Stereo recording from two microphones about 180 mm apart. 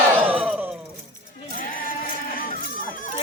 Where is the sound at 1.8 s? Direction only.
55° left (ahead or behind).